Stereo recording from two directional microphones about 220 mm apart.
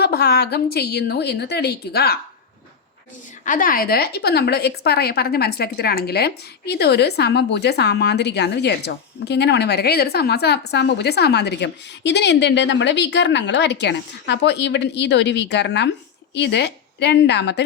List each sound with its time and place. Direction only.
0.0 s speech: 45° left (ahead or behind)
3.4 s speech: 40° left (ahead or behind)